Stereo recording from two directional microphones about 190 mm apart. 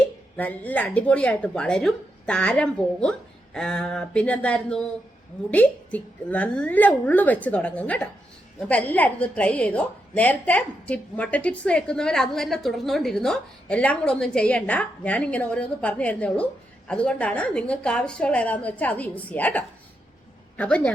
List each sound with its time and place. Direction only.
0.0 s a woman's voice: 10° left (ahead or behind)